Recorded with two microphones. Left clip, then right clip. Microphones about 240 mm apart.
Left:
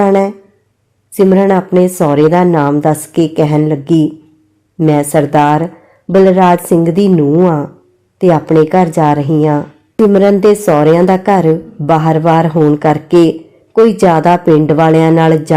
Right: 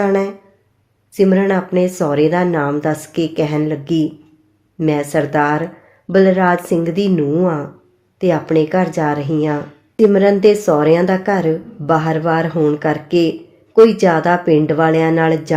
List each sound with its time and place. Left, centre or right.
0.0 s a woman's voice: left